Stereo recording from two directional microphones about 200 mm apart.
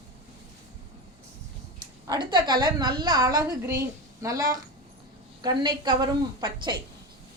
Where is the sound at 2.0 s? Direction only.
20° right (ahead or behind).